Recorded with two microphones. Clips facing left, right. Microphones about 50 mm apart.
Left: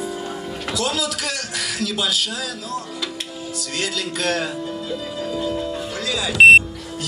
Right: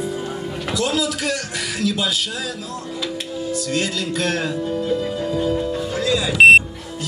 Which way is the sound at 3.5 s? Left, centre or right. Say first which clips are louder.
Right 2 dB; left.